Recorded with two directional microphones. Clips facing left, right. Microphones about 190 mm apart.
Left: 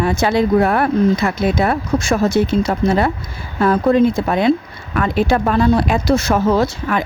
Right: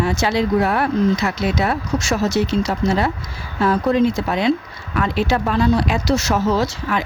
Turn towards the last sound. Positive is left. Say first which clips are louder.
# left 3 dB
turn(degrees=55)  # may be behind; listen again after turning